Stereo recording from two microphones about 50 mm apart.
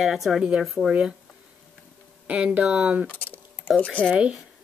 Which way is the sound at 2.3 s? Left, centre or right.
Right.